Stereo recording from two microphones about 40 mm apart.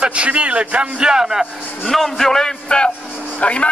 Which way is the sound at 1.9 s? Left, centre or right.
Centre.